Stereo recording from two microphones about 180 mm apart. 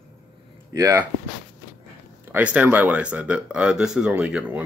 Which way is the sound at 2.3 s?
10° right (ahead or behind).